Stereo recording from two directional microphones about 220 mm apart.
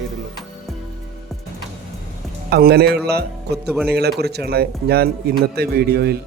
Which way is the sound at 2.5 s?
45° right (ahead or behind).